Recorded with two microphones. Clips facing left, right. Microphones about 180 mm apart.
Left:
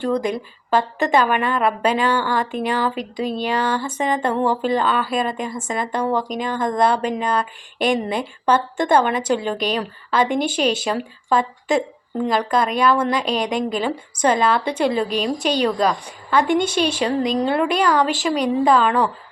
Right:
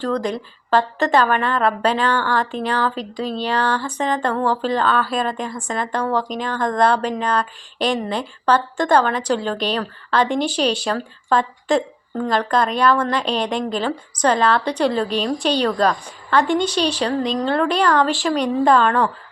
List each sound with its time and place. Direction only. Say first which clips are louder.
0.0 s a woman's voice: left 1 dB; 10° left (ahead or behind)
4.3 s a woman's voice: left 2 dB; 20° left (ahead or behind)
10.4 s speech: even; 50° left (ahead or behind)
10.8 s a woman's voice: even; 10° left (ahead or behind)